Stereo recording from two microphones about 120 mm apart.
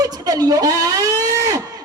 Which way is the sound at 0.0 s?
30° right (ahead or behind).